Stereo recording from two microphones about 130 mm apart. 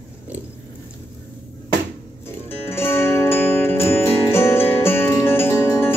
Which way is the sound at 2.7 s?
20° left (ahead or behind).